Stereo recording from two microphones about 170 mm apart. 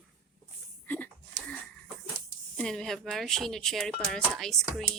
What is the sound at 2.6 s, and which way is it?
Speech, centre (ahead or behind).